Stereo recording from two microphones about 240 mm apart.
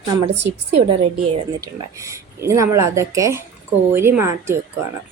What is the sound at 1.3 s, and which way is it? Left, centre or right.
Speech, centre.